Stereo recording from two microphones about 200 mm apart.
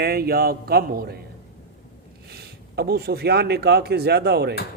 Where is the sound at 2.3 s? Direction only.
50° right (ahead or behind).